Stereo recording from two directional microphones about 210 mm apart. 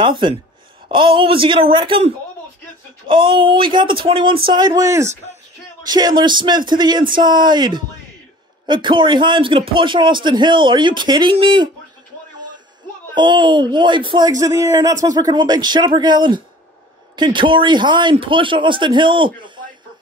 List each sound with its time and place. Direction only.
0.0 s a man's voice: 25° right (ahead or behind)
13.1 s a man's voice: 20° right (ahead or behind)